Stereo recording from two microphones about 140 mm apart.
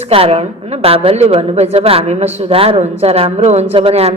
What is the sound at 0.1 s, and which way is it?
A woman's voice, 45° right (ahead or behind).